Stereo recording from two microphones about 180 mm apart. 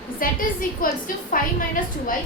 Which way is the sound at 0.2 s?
50° left (ahead or behind).